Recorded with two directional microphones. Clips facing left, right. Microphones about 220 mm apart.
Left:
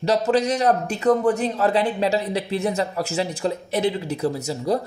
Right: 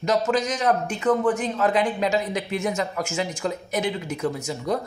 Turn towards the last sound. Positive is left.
turn(degrees=35)  # may be behind; listen again after turning